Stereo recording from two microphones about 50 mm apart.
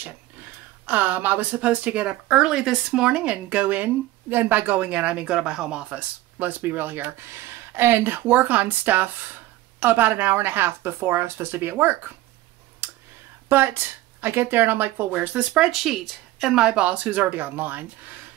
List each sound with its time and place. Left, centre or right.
0.0 s speech: right
12.8 s clicking: right
13.5 s speech: right
15.5 s speech: centre
16.5 s speech: centre; by 18.2 s right